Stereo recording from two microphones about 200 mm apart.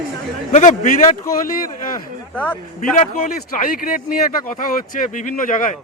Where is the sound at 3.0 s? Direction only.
40° left (ahead or behind).